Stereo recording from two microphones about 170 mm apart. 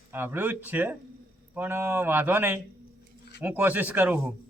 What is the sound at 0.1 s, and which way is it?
Speech, 10° right (ahead or behind).